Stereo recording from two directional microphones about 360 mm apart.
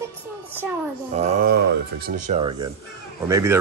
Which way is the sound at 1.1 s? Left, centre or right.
Right.